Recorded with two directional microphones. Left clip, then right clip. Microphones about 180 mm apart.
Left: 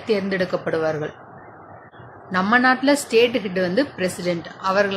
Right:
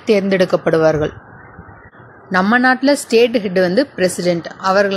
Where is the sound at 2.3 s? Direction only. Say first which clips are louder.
Right 4 dB; 35° right (ahead or behind).